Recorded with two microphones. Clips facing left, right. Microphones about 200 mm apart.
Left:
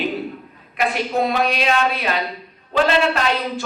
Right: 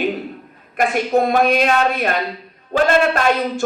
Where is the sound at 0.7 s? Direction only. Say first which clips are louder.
Right 4 dB; 50° right (ahead or behind).